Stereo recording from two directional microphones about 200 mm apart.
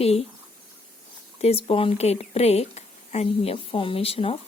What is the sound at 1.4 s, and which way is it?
Speech, 30° left (ahead or behind).